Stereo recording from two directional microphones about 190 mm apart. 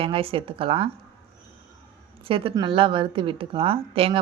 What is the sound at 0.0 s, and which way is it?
Speech, 30° right (ahead or behind).